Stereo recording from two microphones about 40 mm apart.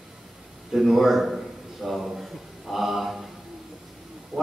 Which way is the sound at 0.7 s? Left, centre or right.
Centre.